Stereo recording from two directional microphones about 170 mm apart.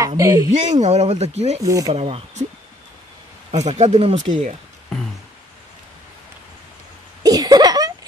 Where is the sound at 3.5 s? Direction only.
40° right (ahead or behind).